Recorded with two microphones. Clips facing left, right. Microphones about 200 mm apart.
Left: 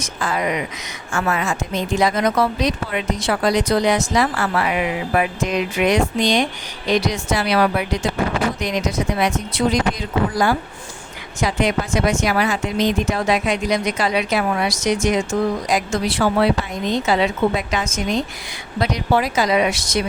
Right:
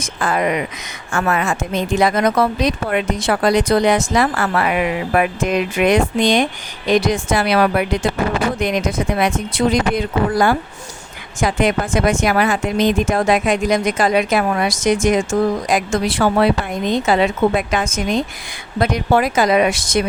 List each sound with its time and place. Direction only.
0.0 s a woman's voice: 55° right (ahead or behind)